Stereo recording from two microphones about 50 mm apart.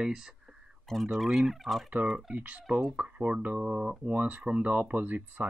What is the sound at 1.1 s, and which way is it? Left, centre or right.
Turkey, centre.